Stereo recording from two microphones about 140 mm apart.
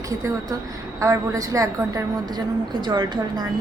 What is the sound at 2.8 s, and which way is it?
Speech, 30° right (ahead or behind).